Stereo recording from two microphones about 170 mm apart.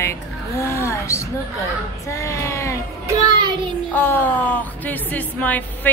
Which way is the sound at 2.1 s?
15° left (ahead or behind).